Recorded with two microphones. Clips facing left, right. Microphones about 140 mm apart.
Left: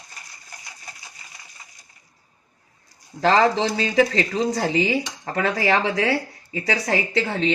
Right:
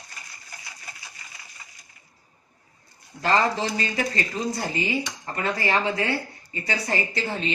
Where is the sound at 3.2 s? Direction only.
90° left.